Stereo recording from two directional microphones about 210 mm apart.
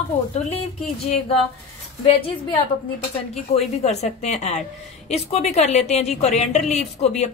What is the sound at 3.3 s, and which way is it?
A woman's voice, 30° left (ahead or behind).